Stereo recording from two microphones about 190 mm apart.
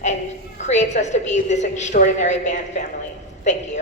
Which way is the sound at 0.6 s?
35° left (ahead or behind).